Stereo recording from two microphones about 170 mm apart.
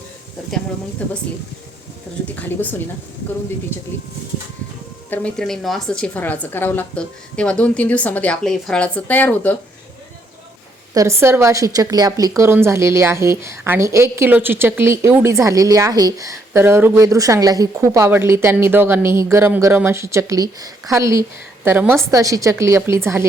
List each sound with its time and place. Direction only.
1.0 s a woman's voice: 10° left (ahead or behind)
2.4 s a woman's voice: 10° left (ahead or behind)
5.1 s a woman's voice: 5° left (ahead or behind)
10.9 s a woman's voice: 15° right (ahead or behind)